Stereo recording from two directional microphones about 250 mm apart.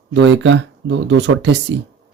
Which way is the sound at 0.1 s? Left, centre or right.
Right.